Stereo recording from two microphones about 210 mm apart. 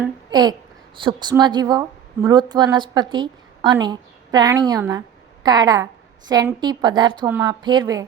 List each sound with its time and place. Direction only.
0.3 s a child's voice: 20° right (ahead or behind)